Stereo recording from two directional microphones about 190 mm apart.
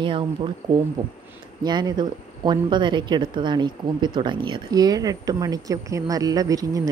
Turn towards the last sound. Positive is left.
turn(degrees=-20)  # may be behind; listen again after turning